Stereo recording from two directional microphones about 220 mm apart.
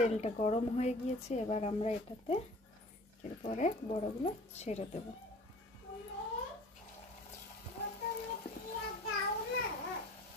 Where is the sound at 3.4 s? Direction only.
35° left (ahead or behind).